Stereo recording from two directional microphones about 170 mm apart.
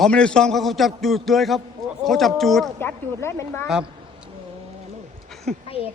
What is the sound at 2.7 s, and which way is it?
Speech, 15° left (ahead or behind).